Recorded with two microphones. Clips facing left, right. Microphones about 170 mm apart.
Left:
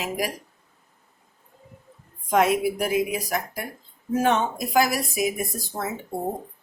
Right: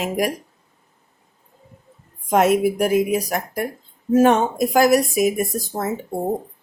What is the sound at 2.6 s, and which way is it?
A woman's voice, 45° right (ahead or behind).